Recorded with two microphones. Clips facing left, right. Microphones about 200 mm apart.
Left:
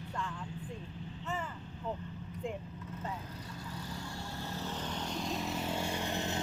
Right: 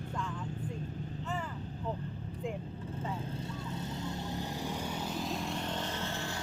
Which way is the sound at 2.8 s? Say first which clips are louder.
Right 3 dB; 30° right (ahead or behind).